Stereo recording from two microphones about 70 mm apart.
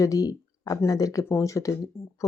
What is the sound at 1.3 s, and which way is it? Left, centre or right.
Speech, left.